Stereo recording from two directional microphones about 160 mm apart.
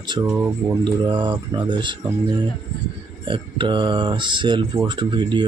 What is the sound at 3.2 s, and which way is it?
Speech, 30° right (ahead or behind).